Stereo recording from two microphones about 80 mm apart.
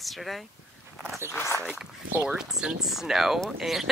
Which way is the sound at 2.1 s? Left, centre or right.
Right.